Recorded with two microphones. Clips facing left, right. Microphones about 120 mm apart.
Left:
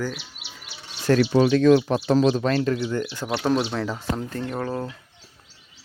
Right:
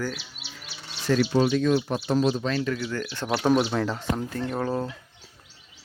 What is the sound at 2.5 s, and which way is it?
Speech, 45° left (ahead or behind).